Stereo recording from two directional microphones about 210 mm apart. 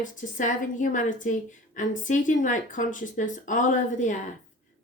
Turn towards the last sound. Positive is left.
turn(degrees=35)  # may be behind; listen again after turning